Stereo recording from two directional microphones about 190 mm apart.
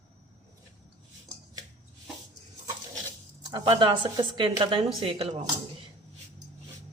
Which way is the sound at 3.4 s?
20° right (ahead or behind).